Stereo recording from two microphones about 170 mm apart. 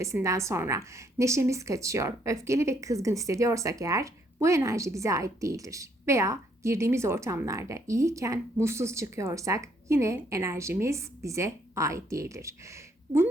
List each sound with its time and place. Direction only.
0.0 s a woman's voice: 15° right (ahead or behind)